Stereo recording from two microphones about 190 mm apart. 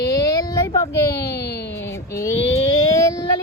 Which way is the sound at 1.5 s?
60° left (ahead or behind).